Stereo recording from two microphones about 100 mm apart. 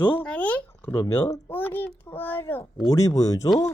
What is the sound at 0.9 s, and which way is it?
Speech, 30° left (ahead or behind).